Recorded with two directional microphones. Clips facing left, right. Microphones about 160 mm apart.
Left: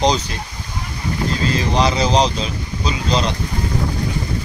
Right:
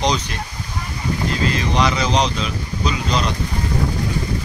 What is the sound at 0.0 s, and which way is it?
Speech, 30° left (ahead or behind).